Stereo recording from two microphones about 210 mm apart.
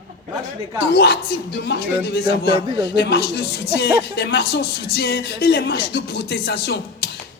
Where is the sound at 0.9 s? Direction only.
50° left (ahead or behind).